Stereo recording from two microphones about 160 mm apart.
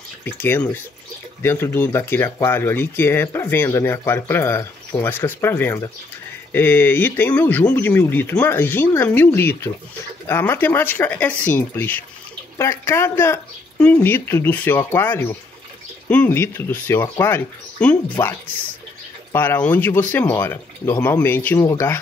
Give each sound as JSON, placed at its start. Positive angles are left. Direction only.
{"t": 0.2, "sound": "speech", "side_deg": 10}
{"t": 19.3, "sound": "speech", "side_deg": 10}